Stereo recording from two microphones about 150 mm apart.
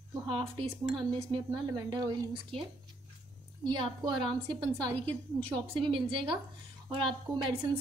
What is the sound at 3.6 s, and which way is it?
Speech, 30° right (ahead or behind).